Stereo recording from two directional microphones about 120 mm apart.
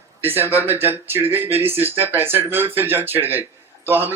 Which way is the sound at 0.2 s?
20° right (ahead or behind).